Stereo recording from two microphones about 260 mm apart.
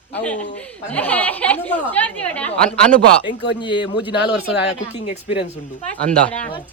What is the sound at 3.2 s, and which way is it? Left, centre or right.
Speech, left.